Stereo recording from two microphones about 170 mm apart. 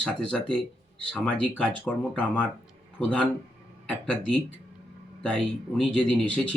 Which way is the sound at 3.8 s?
5° left (ahead or behind).